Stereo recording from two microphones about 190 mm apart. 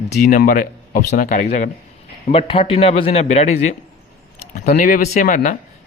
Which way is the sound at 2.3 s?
30° left (ahead or behind).